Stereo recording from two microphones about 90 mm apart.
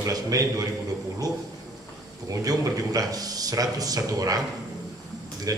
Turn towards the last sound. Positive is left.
turn(degrees=-40)  # may be behind; listen again after turning